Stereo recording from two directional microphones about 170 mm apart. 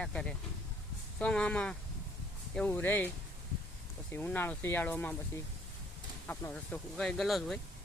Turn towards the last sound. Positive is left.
turn(degrees=0)  # may be behind; listen again after turning